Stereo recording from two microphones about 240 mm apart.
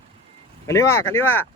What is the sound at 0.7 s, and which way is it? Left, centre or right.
Speech, centre.